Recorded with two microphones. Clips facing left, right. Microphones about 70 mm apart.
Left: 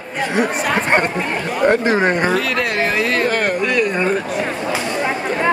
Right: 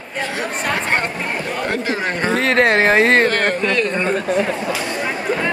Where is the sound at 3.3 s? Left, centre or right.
Centre.